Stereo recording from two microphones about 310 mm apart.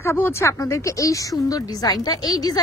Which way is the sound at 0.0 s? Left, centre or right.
Centre.